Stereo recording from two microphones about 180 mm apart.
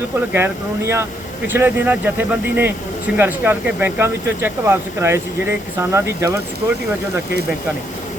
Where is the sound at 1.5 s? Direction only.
10° right (ahead or behind).